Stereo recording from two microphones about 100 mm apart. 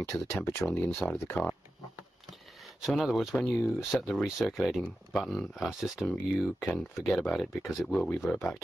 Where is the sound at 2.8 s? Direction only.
Centre (ahead or behind).